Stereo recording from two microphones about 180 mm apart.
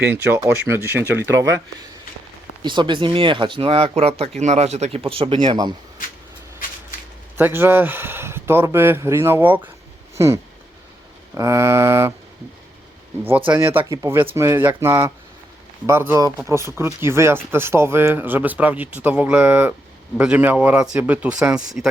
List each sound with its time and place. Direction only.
0.0 s speech: 10° right (ahead or behind)
2.6 s speech: 25° right (ahead or behind)
7.3 s speech: 10° right (ahead or behind)
13.5 s speech: 10° right (ahead or behind)